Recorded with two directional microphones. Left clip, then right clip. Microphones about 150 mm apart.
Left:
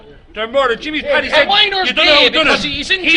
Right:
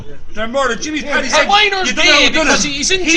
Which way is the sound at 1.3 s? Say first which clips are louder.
Right 2 dB; 20° left (ahead or behind).